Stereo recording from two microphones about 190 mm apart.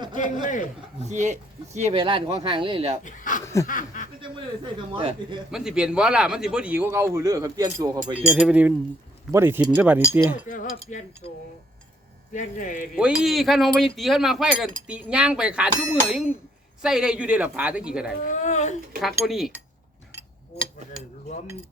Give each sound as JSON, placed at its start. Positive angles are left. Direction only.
{"t": 0.4, "sound": "speech", "side_deg": 45}
{"t": 1.0, "sound": "speech", "side_deg": -40}
{"t": 3.0, "sound": "speech", "side_deg": 40}
{"t": 3.4, "sound": "snicker", "side_deg": 15}
{"t": 3.7, "sound": "speech", "side_deg": 45}
{"t": 5.5, "sound": "speech", "side_deg": -5}
{"t": 8.2, "sound": "speech", "side_deg": -5}
{"t": 10.4, "sound": "speech", "side_deg": 45}
{"t": 12.3, "sound": "speech", "side_deg": 45}
{"t": 13.0, "sound": "speech", "side_deg": -5}
{"t": 18.2, "sound": "speech", "side_deg": 40}
{"t": 19.0, "sound": "speech", "side_deg": 0}